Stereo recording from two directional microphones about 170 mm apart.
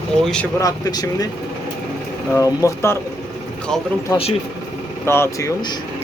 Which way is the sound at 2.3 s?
15° left (ahead or behind).